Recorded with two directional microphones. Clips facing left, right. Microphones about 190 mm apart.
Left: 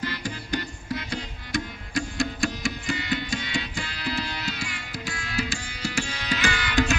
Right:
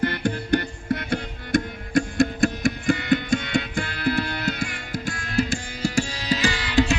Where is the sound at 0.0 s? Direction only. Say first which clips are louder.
Right 8 dB; 60° right (ahead or behind).